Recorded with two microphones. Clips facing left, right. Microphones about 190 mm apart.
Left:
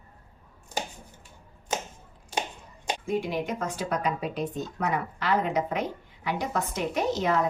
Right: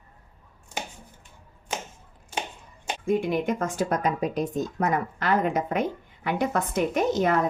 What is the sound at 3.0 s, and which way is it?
A woman's voice, 55° right (ahead or behind).